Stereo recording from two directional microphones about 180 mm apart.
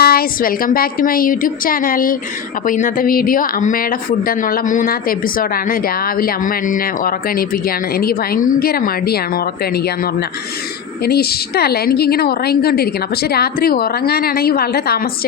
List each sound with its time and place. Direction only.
0.0 s a woman's voice: 55° left (ahead or behind)